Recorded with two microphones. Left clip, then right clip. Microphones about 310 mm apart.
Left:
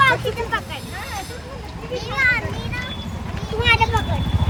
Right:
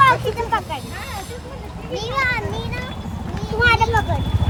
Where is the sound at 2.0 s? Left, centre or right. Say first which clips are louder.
Left 2 dB; centre.